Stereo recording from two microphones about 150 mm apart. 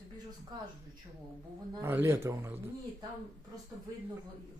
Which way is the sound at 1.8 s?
15° right (ahead or behind).